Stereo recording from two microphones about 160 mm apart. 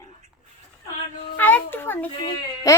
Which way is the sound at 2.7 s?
20° left (ahead or behind).